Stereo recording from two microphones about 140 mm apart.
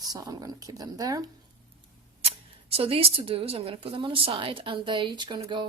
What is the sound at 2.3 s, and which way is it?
Speech, 45° right (ahead or behind).